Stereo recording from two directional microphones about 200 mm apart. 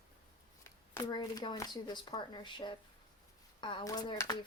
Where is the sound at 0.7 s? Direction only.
15° left (ahead or behind).